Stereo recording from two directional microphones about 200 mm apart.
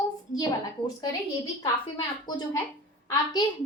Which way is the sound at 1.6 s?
20° left (ahead or behind).